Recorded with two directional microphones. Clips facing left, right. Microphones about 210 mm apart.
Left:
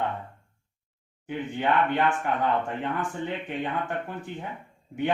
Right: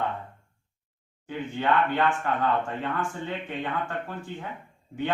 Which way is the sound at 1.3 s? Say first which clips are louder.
Even; 15° left (ahead or behind).